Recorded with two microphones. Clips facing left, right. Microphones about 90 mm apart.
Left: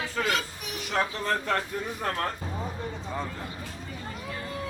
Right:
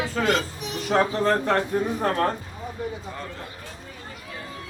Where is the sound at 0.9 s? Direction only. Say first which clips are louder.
Right 7 dB; 40° right (ahead or behind).